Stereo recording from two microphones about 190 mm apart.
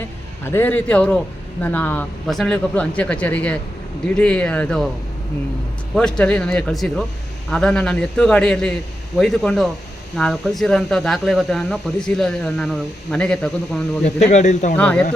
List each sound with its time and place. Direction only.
0.4 s speech: 10° left (ahead or behind)
6.0 s speech: 5° left (ahead or behind)
14.0 s speech: 35° left (ahead or behind)
14.8 s speech: 5° left (ahead or behind)